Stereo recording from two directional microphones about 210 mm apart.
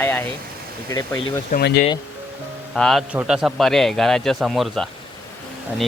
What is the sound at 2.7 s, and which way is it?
Speech, centre (ahead or behind).